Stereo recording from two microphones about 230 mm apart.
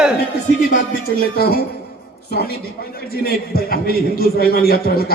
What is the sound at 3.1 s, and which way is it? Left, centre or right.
A man's voice, left.